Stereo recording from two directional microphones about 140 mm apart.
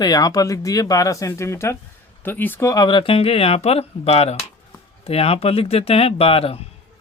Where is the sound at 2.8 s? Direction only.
35° left (ahead or behind).